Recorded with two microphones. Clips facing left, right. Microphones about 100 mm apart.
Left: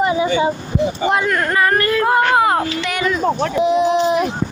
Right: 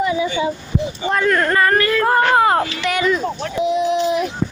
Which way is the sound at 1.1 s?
10° left (ahead or behind).